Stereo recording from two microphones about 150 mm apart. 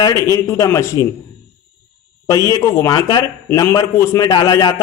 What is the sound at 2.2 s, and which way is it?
A man's voice, 20° left (ahead or behind).